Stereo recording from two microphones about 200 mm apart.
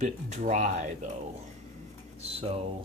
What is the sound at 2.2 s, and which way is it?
Speech, 30° right (ahead or behind).